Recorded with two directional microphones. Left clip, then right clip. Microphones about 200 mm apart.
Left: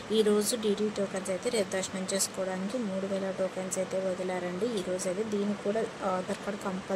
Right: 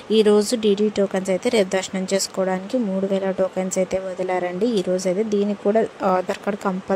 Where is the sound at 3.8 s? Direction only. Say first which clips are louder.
Right 8 dB; 40° right (ahead or behind).